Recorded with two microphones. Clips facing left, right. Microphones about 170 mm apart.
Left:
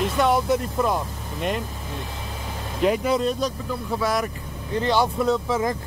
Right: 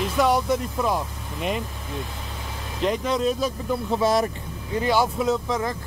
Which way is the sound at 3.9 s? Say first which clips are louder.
Right 3 dB; 25° right (ahead or behind).